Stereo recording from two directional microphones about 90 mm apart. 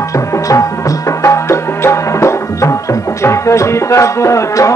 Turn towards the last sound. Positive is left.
turn(degrees=35)  # may be behind; listen again after turning